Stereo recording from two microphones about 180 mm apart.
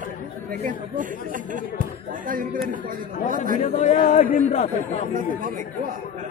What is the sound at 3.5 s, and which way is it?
Speech, 45° left (ahead or behind).